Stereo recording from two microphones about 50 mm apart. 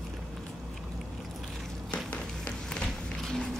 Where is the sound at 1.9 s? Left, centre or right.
Centre.